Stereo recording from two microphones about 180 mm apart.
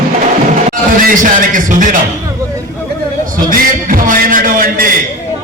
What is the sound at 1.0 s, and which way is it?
A man's voice, 45° right (ahead or behind).